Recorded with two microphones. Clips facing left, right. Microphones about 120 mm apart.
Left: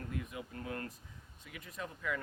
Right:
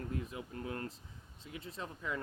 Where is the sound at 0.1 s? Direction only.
30° right (ahead or behind).